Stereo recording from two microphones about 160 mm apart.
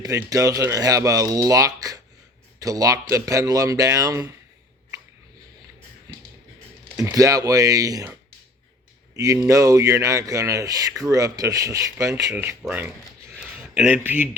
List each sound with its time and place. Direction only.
0.3 s speech: 20° right (ahead or behind)
6.9 s speech: 20° right (ahead or behind)
9.1 s speech: 20° right (ahead or behind)
13.4 s a sound: 5° right (ahead or behind)